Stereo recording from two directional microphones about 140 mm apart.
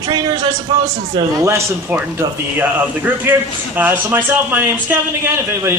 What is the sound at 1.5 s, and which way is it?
A man's voice, 20° right (ahead or behind).